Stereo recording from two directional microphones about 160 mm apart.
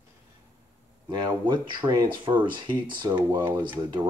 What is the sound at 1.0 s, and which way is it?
Speech, 30° right (ahead or behind).